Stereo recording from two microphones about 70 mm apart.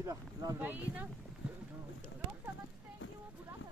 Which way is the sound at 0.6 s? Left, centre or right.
Right.